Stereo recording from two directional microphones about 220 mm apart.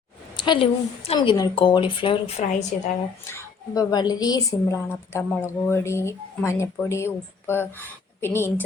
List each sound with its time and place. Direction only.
0.3 s speech: 20° left (ahead or behind)
3.2 s a woman's voice: 15° left (ahead or behind)